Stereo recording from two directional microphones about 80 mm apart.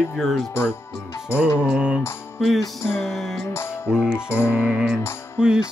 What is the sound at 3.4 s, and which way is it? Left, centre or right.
Music, left.